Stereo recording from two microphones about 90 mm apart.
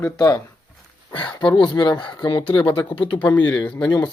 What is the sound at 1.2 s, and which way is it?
Speech, 60° left (ahead or behind).